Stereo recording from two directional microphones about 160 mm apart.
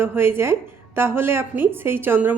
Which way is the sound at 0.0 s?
15° right (ahead or behind).